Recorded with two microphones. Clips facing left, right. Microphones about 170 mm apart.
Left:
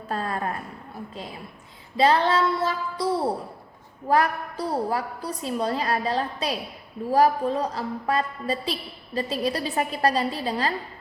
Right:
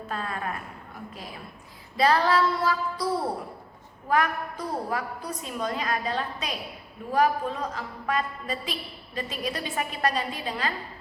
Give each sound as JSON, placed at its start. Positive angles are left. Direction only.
{"t": 0.1, "sound": "a sound", "side_deg": 35}
{"t": 2.0, "sound": "female singing", "side_deg": 25}
{"t": 4.1, "sound": "a woman's voice", "side_deg": 35}